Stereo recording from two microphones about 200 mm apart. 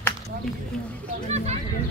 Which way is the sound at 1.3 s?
35° right (ahead or behind).